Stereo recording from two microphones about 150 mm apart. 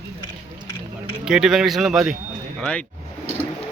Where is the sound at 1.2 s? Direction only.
5° right (ahead or behind).